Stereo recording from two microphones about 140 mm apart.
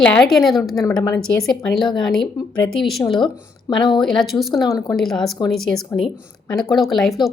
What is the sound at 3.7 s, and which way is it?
Speech, 35° left (ahead or behind).